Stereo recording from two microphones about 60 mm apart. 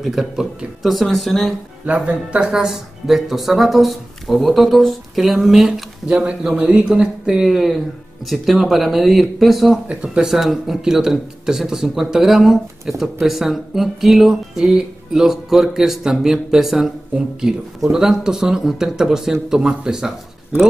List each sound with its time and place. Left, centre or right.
0.0 s speech: centre
2.0 s speech: centre
2.5 s speech: centre